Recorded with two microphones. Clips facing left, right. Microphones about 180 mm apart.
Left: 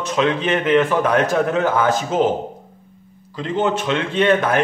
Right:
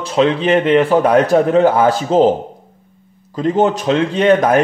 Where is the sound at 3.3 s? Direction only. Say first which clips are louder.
Right 6 dB; 45° right (ahead or behind).